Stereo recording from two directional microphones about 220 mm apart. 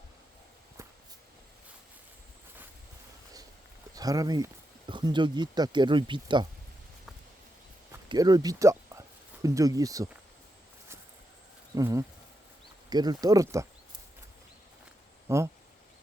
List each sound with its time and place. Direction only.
3.9 s speech: 15° right (ahead or behind)
8.1 s speech: 20° right (ahead or behind)
11.7 s speech: 15° right (ahead or behind)
15.3 s speech: 10° right (ahead or behind)